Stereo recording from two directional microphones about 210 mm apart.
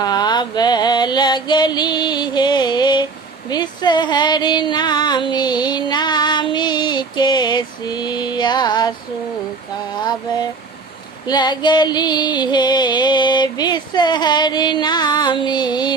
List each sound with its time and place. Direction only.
0.0 s music: 20° left (ahead or behind)
3.5 s a sound: 20° left (ahead or behind)
10.0 s music: 20° left (ahead or behind)